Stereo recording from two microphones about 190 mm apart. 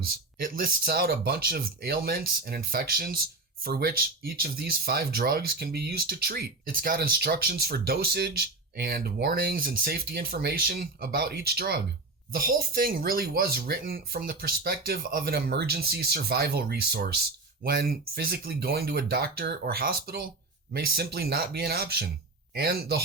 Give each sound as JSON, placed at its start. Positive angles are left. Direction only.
{"t": 0.0, "sound": "speech", "side_deg": -50}